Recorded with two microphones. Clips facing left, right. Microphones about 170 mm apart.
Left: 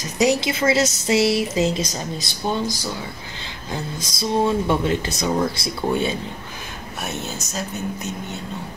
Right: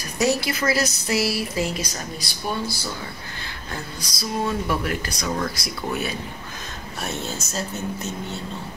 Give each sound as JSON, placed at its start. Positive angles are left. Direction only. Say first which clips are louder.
{"t": 0.0, "sound": "speech", "louder": "left 3 dB", "side_deg": 20}
{"t": 7.4, "sound": "a woman's voice", "louder": "left 1 dB", "side_deg": 0}